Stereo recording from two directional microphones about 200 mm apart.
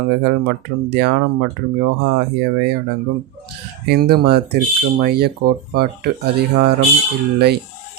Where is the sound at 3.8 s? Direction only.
55° right (ahead or behind).